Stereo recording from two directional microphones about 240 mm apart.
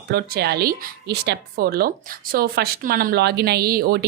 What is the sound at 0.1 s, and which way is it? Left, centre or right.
Speech, right.